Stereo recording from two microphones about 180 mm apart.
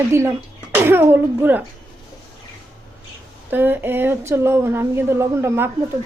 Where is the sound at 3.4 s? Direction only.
10° right (ahead or behind).